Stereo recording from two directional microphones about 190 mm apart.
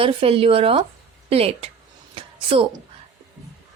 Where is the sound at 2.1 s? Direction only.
30° right (ahead or behind).